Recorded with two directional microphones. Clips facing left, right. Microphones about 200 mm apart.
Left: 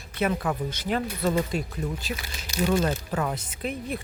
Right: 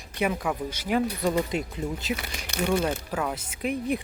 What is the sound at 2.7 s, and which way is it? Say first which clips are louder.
Speech: even; 10° right (ahead or behind).